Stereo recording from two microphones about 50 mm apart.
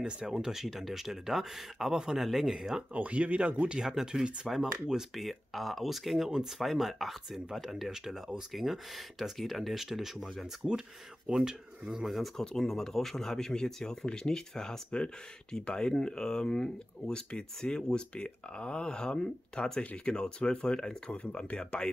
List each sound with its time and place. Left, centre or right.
0.0 s speech: centre
2.9 s speech: right
3.8 s speech: centre
12.1 s speech: centre